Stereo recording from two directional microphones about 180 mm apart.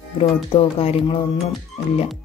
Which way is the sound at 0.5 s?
30° left (ahead or behind).